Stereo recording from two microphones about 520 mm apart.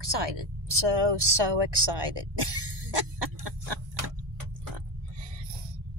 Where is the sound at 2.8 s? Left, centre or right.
Right.